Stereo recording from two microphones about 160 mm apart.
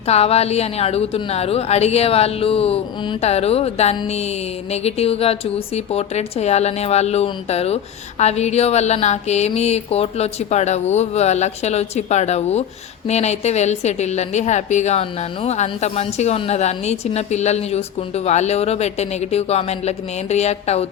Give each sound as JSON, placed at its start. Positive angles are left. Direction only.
{"t": 0.1, "sound": "a woman's voice", "side_deg": 40}